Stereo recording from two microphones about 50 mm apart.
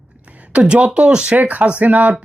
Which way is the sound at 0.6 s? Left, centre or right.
Centre.